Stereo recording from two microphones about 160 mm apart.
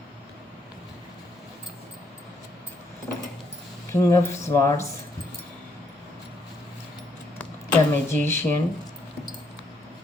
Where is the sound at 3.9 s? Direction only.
20° left (ahead or behind).